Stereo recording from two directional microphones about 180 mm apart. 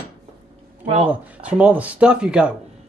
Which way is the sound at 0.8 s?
40° right (ahead or behind).